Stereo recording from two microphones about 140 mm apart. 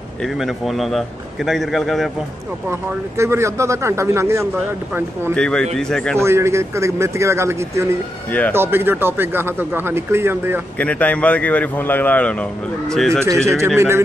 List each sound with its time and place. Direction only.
0.2 s a man's voice: centre (ahead or behind)
3.2 s speech: 20° right (ahead or behind)
5.3 s a man's voice: 5° left (ahead or behind)
6.1 s speech: 20° right (ahead or behind)
8.3 s speech: 10° left (ahead or behind)
8.5 s speech: 15° right (ahead or behind)
10.8 s a man's voice: 10° left (ahead or behind)
13.2 s speech: 20° right (ahead or behind)